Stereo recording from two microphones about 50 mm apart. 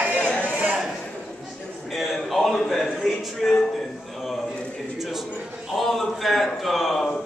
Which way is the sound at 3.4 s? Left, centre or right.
Centre.